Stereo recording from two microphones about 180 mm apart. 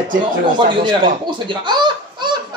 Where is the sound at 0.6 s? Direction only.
25° right (ahead or behind).